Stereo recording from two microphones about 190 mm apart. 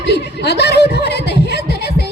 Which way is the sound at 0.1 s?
60° left (ahead or behind).